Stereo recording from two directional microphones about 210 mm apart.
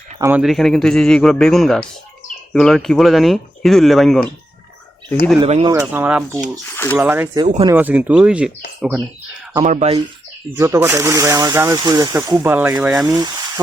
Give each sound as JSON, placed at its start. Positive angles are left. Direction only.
{"t": 0.2, "sound": "speech", "side_deg": -10}
{"t": 5.4, "sound": "speech", "side_deg": -25}
{"t": 5.7, "sound": "speech", "side_deg": -10}
{"t": 7.4, "sound": "speech", "side_deg": -30}
{"t": 7.7, "sound": "speech", "side_deg": -10}
{"t": 9.6, "sound": "speech", "side_deg": -30}
{"t": 10.5, "sound": "speech", "side_deg": -15}
{"t": 13.1, "sound": "speech", "side_deg": -20}